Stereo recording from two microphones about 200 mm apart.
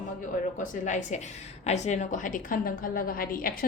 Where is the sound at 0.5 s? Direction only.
40° left (ahead or behind).